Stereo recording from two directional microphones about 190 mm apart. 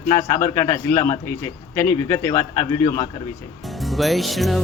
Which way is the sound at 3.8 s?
Centre (ahead or behind).